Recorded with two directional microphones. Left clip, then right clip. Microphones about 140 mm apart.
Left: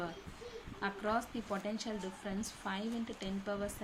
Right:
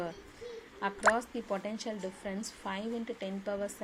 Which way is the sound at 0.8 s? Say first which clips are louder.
Right 7 dB; 15° right (ahead or behind).